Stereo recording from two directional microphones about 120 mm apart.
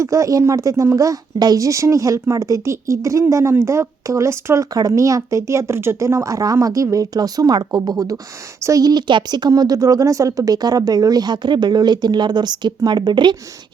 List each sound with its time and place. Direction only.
0.0 s a woman's voice: 25° right (ahead or behind)